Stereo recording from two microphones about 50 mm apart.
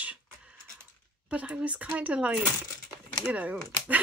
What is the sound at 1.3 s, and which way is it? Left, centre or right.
Speech, right.